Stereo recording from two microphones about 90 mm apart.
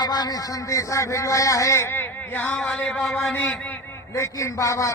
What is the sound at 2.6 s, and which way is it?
Speech, 5° left (ahead or behind).